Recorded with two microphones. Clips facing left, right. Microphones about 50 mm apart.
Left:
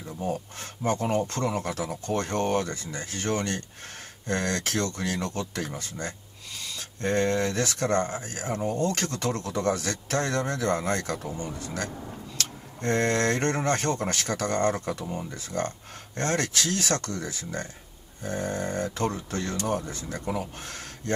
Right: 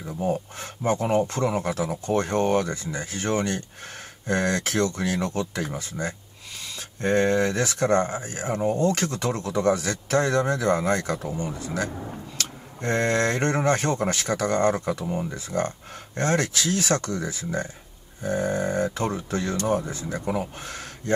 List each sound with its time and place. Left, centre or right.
0.0 s speech: centre